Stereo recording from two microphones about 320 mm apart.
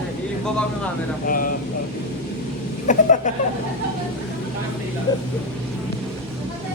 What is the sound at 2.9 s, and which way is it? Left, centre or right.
Speech, left.